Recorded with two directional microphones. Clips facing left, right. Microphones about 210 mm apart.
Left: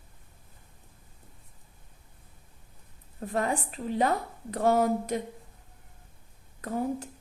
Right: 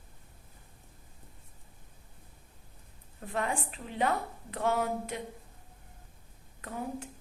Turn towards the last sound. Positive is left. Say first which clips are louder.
# left 7 dB
turn(degrees=40)  # may be behind; listen again after turning